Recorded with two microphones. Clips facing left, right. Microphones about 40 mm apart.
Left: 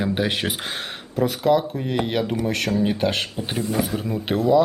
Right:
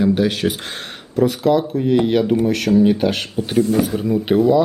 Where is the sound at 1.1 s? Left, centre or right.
Centre.